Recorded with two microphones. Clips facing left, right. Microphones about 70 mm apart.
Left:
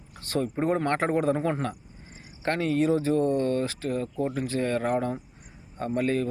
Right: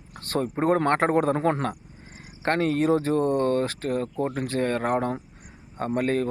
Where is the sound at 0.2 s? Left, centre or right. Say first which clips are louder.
Right 1 dB; right.